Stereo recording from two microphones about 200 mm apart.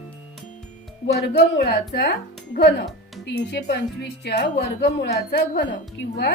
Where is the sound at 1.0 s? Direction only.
55° left (ahead or behind).